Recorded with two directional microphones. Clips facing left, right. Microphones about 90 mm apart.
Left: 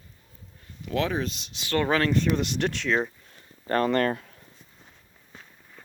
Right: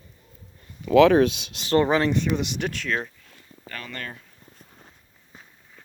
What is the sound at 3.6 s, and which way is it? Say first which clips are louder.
Speech: left 14 dB; 45° left (ahead or behind).